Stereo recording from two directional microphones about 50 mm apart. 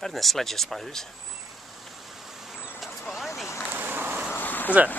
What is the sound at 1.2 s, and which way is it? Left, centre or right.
Vehicle, centre.